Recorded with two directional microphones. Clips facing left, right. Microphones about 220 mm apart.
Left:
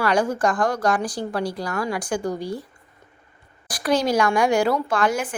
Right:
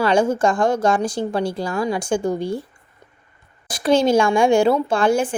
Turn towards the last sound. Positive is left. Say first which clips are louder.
# right 5 dB
turn(degrees=-30)  # may be behind; listen again after turning